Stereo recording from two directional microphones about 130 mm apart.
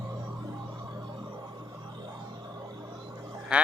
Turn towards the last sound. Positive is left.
turn(degrees=-10)  # may be behind; listen again after turning